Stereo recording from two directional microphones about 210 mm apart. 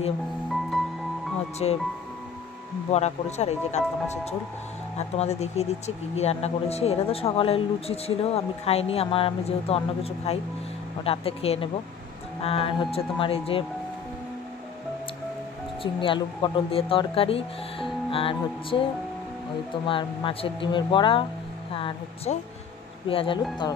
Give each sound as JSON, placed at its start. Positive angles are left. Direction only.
{"t": 0.5, "sound": "music", "side_deg": 0}
{"t": 1.6, "sound": "speech", "side_deg": 25}
{"t": 2.9, "sound": "speech", "side_deg": 30}
{"t": 15.8, "sound": "speech", "side_deg": 25}
{"t": 19.9, "sound": "speech", "side_deg": 25}